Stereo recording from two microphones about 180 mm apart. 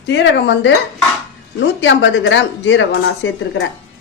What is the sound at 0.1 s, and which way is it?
Speech, 70° left (ahead or behind).